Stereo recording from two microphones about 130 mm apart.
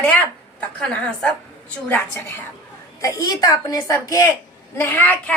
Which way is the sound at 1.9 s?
15° left (ahead or behind).